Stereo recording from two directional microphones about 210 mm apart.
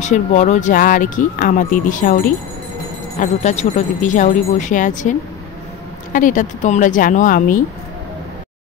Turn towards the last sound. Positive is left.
turn(degrees=40)  # may be behind; listen again after turning